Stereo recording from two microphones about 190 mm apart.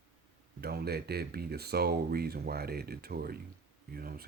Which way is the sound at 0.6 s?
55° right (ahead or behind).